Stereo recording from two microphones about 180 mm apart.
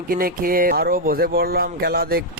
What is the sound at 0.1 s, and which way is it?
Speech, 50° right (ahead or behind).